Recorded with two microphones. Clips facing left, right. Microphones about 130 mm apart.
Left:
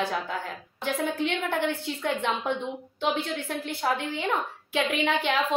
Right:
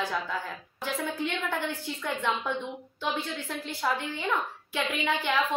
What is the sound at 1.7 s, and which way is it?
A woman's voice, 20° left (ahead or behind).